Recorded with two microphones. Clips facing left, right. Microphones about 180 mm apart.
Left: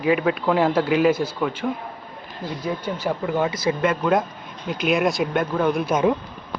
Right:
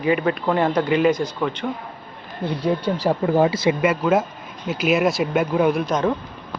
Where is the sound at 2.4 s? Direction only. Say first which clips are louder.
Right 5 dB; 55° right (ahead or behind).